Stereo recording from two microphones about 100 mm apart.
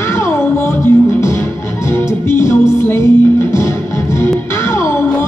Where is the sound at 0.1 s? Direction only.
25° left (ahead or behind).